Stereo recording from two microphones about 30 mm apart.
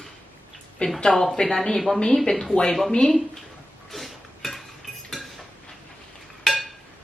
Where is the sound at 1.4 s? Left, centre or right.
Centre.